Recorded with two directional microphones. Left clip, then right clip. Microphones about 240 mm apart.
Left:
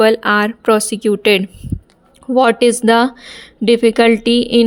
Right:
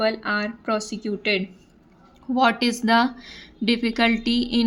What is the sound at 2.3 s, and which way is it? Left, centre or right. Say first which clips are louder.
A woman's voice: left 9 dB; left.